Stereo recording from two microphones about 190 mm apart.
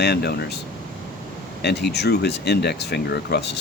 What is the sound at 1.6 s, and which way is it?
Speech, 60° left (ahead or behind).